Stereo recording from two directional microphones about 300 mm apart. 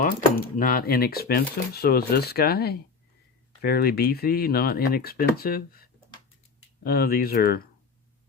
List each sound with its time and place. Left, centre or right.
0.0 s speech: left